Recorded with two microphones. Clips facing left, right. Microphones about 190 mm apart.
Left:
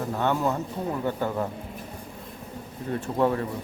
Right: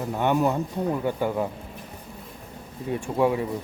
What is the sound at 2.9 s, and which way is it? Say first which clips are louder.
Speech: right 1 dB; 10° right (ahead or behind).